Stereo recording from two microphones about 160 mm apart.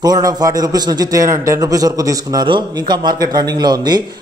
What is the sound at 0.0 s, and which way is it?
A man's voice, 25° right (ahead or behind).